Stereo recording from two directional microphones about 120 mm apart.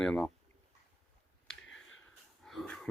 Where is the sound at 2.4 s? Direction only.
10° left (ahead or behind).